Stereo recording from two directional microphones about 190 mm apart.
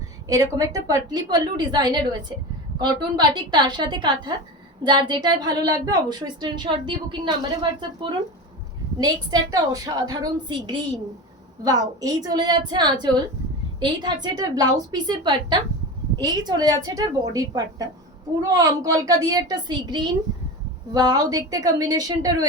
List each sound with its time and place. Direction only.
0.3 s a woman's voice: 20° right (ahead or behind)